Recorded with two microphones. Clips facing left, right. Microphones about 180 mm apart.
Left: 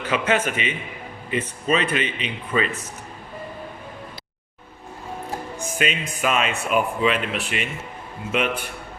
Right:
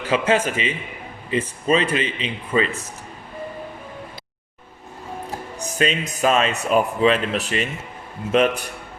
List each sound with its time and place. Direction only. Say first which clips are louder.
0.1 s speech: right 3 dB; 30° right (ahead or behind)
5.7 s speech: right 4 dB; 35° right (ahead or behind)